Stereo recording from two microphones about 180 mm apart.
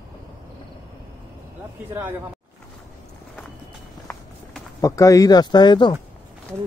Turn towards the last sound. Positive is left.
turn(degrees=25)  # may be behind; listen again after turning